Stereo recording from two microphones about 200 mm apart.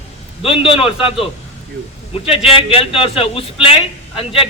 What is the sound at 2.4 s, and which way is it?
A man's voice, 30° left (ahead or behind).